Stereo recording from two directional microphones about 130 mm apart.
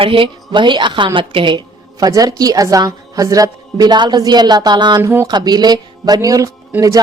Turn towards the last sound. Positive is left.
turn(degrees=-25)  # may be behind; listen again after turning